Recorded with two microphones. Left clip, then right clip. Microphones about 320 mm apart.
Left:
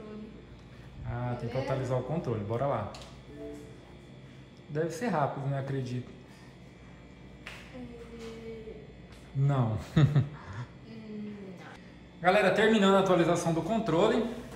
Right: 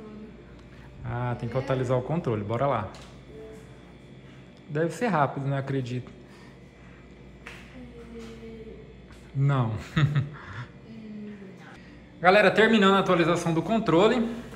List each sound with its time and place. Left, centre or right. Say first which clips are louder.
1.1 s speech: right 4 dB; centre
4.7 s speech: right 5 dB; centre
9.4 s a man's voice: right 3 dB; centre
10.1 s a sound: right 1 dB; centre
12.2 s a man's voice: right 6 dB; centre